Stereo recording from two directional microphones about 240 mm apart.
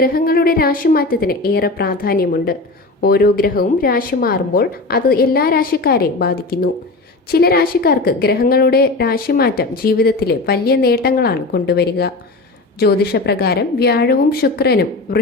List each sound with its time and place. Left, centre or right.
0.0 s a woman's voice: left